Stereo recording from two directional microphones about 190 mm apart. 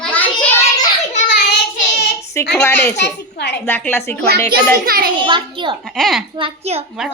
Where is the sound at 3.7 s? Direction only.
10° left (ahead or behind).